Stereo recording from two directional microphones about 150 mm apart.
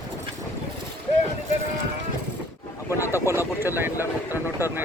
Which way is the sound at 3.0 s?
20° left (ahead or behind).